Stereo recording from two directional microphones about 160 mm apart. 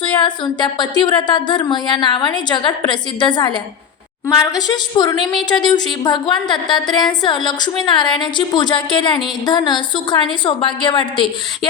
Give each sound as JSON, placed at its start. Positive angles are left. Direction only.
{"t": 0.0, "sound": "a woman's voice", "side_deg": 30}